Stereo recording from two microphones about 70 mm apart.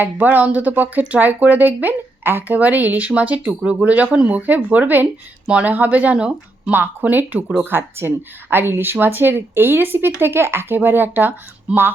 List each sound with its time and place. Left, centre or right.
0.0 s speech: right